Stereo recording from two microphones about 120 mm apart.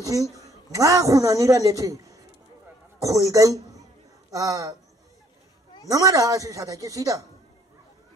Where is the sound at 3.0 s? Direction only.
30° right (ahead or behind).